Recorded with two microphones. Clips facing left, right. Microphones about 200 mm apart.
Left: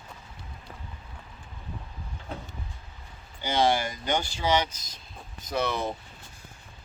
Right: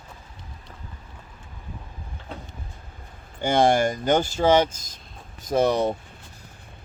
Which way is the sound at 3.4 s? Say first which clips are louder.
Right 6 dB; 50° right (ahead or behind).